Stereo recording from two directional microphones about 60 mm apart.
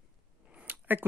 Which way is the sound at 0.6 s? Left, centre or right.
Right.